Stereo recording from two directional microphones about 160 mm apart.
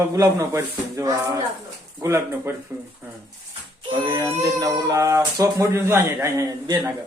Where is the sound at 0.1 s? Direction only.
20° right (ahead or behind).